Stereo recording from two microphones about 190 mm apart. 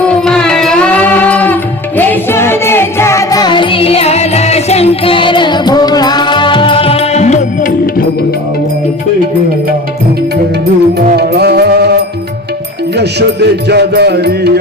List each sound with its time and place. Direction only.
0.3 s music: 5° left (ahead or behind); by 8.0 s 40° left (ahead or behind)
11.2 s music: 60° right (ahead or behind)
13.0 s music: 60° right (ahead or behind)